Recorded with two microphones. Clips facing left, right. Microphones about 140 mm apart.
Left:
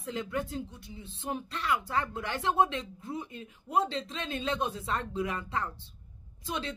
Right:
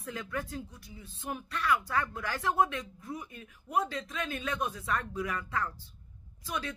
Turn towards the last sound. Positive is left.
turn(degrees=25)  # may be behind; listen again after turning